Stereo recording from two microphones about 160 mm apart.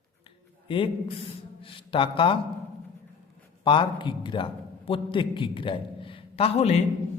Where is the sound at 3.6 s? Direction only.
30° left (ahead or behind).